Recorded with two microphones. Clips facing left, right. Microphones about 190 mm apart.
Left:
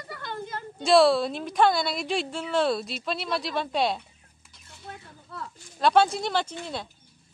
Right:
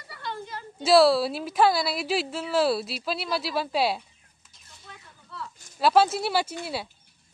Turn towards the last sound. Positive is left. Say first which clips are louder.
# right 2 dB
turn(degrees=-10)  # may be behind; listen again after turning